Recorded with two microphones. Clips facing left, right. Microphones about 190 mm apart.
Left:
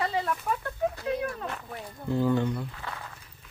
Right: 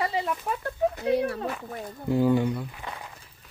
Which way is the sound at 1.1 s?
75° right (ahead or behind).